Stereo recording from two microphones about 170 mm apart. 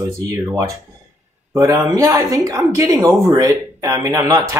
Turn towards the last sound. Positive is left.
turn(degrees=-20)  # may be behind; listen again after turning